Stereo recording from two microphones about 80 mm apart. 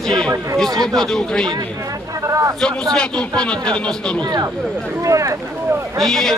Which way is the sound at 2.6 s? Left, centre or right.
Centre.